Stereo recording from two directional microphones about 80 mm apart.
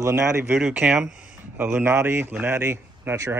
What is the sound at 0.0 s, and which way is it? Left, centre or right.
Speech, right.